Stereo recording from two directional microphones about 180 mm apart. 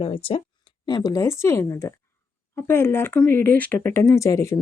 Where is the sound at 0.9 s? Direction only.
20° left (ahead or behind).